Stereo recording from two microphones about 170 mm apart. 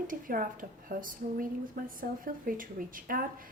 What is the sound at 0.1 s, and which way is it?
A woman's voice, 55° right (ahead or behind).